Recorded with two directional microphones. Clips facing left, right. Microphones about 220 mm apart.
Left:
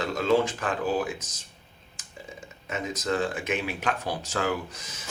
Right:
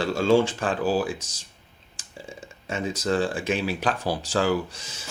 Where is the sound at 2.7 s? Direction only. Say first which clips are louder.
Right 3 dB; 30° right (ahead or behind).